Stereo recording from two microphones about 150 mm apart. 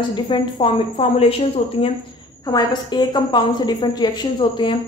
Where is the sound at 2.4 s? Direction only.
25° left (ahead or behind).